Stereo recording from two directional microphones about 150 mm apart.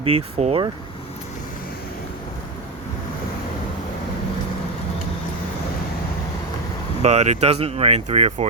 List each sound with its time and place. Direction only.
0.0 s speech: 40° right (ahead or behind)
7.0 s speech: 45° right (ahead or behind)